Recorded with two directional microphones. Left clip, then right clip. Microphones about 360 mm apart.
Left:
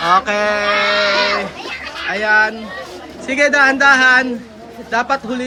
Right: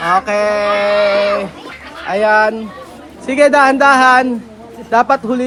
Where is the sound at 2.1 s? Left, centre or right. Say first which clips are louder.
Right 3 dB; centre.